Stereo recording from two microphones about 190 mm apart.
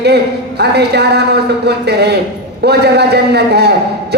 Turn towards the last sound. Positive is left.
turn(degrees=-60)  # may be behind; listen again after turning